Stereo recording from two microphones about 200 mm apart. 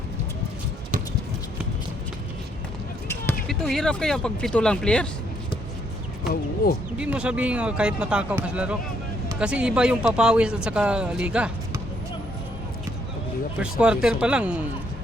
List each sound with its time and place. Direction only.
3.1 s speech: 5° left (ahead or behind)
6.6 s speech: 45° left (ahead or behind)
7.0 s speech: 5° right (ahead or behind)
13.6 s speech: 5° right (ahead or behind)